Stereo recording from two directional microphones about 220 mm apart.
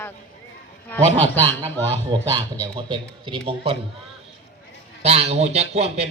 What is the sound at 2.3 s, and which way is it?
Speech, 20° right (ahead or behind).